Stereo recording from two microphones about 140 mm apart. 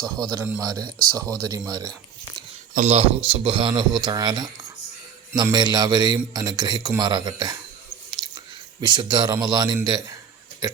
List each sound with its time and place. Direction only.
0.0 s speech: 25° right (ahead or behind)
2.7 s speech: 50° right (ahead or behind)
3.2 s speech: 40° right (ahead or behind)
8.8 s speech: 30° right (ahead or behind)